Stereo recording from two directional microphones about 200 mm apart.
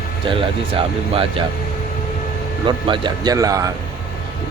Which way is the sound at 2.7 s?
25° right (ahead or behind).